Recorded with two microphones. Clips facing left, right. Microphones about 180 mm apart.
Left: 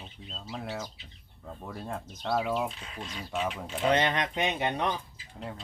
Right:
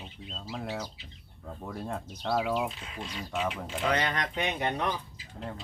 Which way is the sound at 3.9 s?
25° left (ahead or behind).